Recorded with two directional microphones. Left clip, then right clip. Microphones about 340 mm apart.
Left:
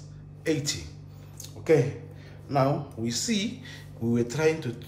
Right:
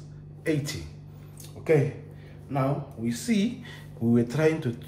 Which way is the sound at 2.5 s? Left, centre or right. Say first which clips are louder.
Left 4 dB; centre.